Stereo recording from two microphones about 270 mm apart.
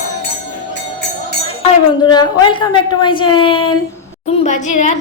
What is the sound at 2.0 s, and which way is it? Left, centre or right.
A woman's voice, centre.